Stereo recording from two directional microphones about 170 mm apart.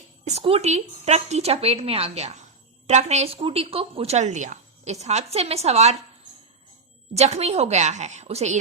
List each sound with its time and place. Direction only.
0.3 s speech: 35° right (ahead or behind)
7.1 s speech: 40° right (ahead or behind)